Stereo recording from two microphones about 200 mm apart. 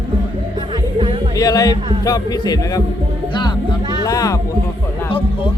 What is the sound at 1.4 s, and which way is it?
Speech, 20° left (ahead or behind).